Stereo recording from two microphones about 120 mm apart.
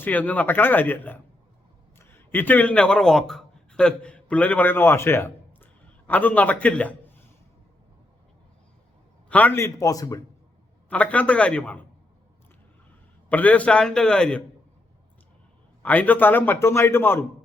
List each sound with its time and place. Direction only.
0.0 s a man's voice: 15° left (ahead or behind)
9.3 s a man's voice: 15° left (ahead or behind)
10.8 s a man's voice: 10° left (ahead or behind)
13.3 s a man's voice: 10° left (ahead or behind)
15.8 s a man's voice: 15° left (ahead or behind)